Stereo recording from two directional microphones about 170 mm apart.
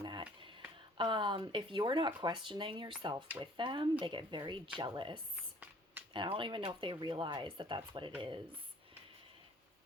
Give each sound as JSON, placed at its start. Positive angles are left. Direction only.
{"t": 0.0, "sound": "speech", "side_deg": -30}